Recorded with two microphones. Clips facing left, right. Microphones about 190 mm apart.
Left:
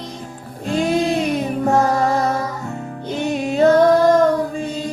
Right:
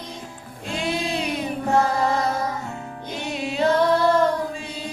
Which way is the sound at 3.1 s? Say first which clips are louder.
Left 8 dB; 45° left (ahead or behind).